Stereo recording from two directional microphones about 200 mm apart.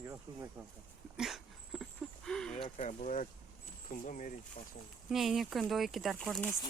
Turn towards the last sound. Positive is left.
turn(degrees=0)  # may be behind; listen again after turning